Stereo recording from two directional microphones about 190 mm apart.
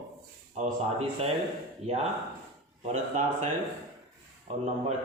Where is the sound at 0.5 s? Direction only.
35° right (ahead or behind).